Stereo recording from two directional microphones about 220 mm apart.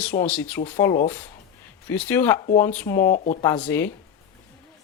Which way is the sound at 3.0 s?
40° left (ahead or behind).